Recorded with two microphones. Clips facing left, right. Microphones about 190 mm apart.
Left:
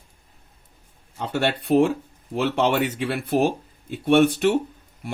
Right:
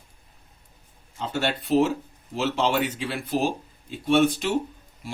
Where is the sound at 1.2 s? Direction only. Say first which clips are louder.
Left 3 dB; 60° left (ahead or behind).